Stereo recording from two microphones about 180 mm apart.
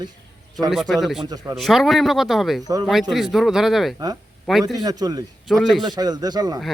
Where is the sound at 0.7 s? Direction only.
Centre (ahead or behind).